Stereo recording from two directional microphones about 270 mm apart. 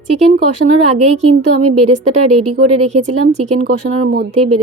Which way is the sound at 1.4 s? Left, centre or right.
Right.